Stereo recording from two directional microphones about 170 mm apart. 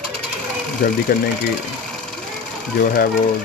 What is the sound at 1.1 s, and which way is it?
Speech, 60° left (ahead or behind).